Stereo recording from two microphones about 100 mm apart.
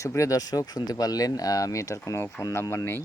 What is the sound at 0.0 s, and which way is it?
Speech, 30° left (ahead or behind).